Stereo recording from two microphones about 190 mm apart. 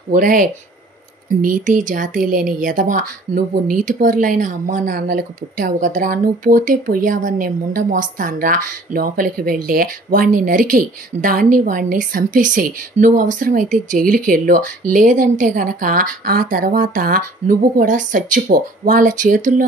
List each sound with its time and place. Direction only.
0.1 s speech: 45° right (ahead or behind)